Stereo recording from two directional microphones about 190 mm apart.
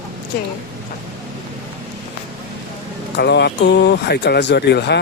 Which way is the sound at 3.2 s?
65° left (ahead or behind).